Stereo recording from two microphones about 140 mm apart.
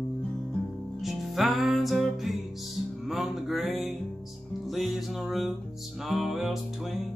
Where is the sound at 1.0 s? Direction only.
Centre (ahead or behind).